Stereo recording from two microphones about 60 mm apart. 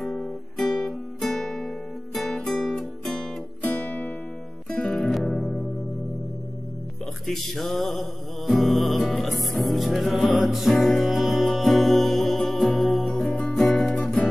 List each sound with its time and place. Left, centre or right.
0.1 s guitar: centre
1.2 s music: centre
3.8 s music: left
7.2 s music: centre
13.4 s music: centre